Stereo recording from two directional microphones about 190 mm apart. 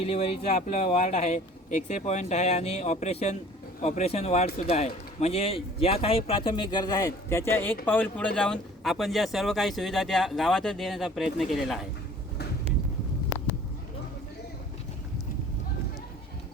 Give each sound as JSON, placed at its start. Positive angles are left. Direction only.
{"t": 0.0, "sound": "speech", "side_deg": 30}